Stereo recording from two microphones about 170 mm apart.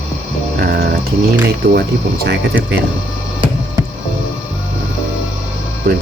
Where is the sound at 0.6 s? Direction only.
65° right (ahead or behind).